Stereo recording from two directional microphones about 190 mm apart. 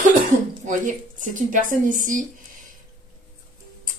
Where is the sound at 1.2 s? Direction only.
45° right (ahead or behind).